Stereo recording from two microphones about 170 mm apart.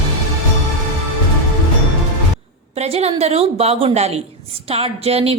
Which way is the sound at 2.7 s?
40° right (ahead or behind).